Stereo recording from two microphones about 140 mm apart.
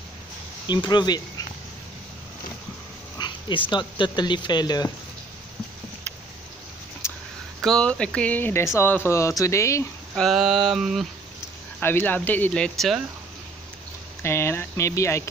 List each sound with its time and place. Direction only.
0.7 s speech: 30° left (ahead or behind)
3.2 s speech: 35° left (ahead or behind)
7.0 s a sound: 20° left (ahead or behind)
7.6 s speech: 5° left (ahead or behind); by 9.8 s 20° left (ahead or behind)
10.1 s a sound: centre (ahead or behind)
11.8 s speech: 15° left (ahead or behind)
14.2 s speech: 20° left (ahead or behind)